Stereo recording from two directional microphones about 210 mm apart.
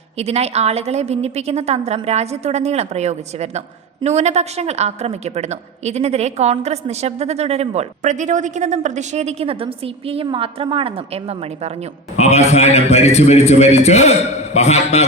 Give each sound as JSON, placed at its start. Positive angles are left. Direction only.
{"t": 0.2, "sound": "a woman's voice", "side_deg": -30}
{"t": 12.1, "sound": "a man's voice", "side_deg": 30}